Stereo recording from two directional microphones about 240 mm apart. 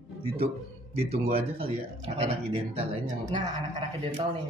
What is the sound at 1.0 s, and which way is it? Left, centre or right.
Speech, right.